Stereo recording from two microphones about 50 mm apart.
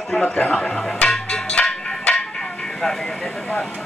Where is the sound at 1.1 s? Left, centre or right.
Centre.